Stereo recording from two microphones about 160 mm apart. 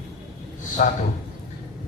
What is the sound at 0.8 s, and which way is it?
Speech, 50° left (ahead or behind).